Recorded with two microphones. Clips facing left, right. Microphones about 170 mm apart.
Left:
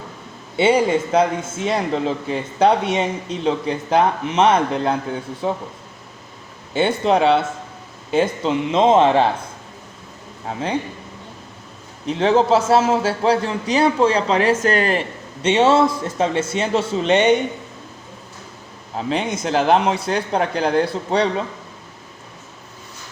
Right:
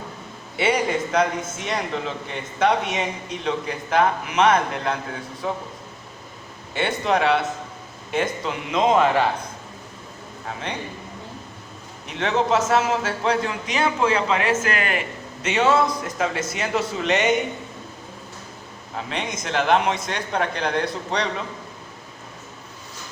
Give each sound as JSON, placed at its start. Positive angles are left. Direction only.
{"t": 0.5, "sound": "a man's voice", "side_deg": 30}
{"t": 6.7, "sound": "speech", "side_deg": 30}
{"t": 10.4, "sound": "a man's voice", "side_deg": 30}
{"t": 12.0, "sound": "a man's voice", "side_deg": 30}
{"t": 18.9, "sound": "a man's voice", "side_deg": 30}